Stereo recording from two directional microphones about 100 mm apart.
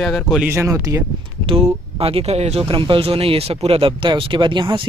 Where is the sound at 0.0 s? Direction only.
Centre (ahead or behind).